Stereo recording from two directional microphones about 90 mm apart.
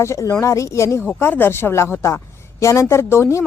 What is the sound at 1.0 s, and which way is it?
A woman's voice, 20° left (ahead or behind).